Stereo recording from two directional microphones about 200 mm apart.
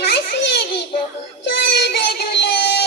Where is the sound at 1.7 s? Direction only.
55° left (ahead or behind).